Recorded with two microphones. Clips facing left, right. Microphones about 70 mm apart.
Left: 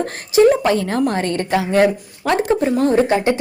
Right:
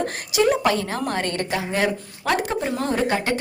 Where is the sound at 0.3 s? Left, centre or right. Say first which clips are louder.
Left 7 dB; left.